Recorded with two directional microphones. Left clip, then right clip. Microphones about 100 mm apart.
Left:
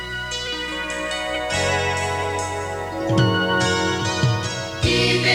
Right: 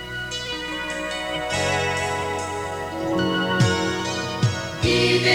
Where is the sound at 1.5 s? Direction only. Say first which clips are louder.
Left 1 dB; 35° right (ahead or behind).